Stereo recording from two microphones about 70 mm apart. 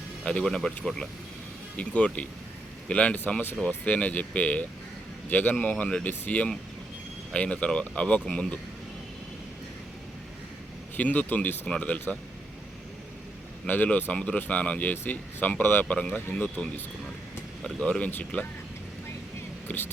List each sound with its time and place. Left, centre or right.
0.3 s speech: centre
10.9 s speech: left
13.7 s speech: left
17.8 s speech: centre
19.6 s speech: left